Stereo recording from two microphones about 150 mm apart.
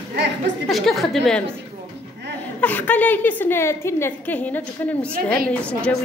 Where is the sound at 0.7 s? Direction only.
Centre (ahead or behind).